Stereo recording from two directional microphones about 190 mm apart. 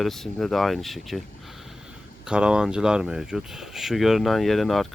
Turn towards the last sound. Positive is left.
turn(degrees=0)  # may be behind; listen again after turning